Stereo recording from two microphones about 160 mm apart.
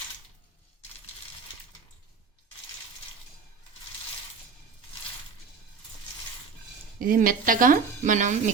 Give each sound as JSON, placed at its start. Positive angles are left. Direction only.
{"t": 7.0, "sound": "speech", "side_deg": -60}